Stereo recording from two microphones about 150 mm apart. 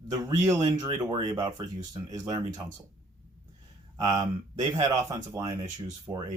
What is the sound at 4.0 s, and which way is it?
Speech, 25° right (ahead or behind).